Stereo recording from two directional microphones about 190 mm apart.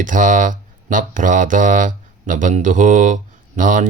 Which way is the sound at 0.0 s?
45° right (ahead or behind).